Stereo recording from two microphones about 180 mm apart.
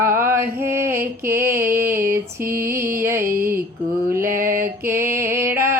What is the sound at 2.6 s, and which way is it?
Music, 15° right (ahead or behind).